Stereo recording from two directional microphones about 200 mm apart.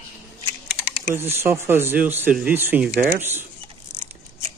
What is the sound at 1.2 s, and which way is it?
Speech, 10° right (ahead or behind).